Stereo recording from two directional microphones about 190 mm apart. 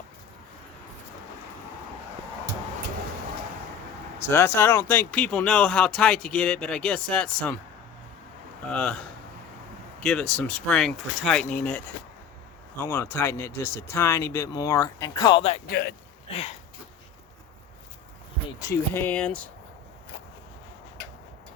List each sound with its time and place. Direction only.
4.2 s speech: 10° left (ahead or behind)
8.7 s speech: 5° left (ahead or behind)
10.0 s speech: 5° left (ahead or behind); by 15.6 s 30° left (ahead or behind)
15.7 s a man's voice: 55° left (ahead or behind)
16.3 s a sound: 35° left (ahead or behind)
18.7 s speech: 10° left (ahead or behind)